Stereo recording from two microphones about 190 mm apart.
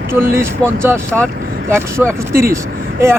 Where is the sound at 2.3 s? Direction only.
15° right (ahead or behind).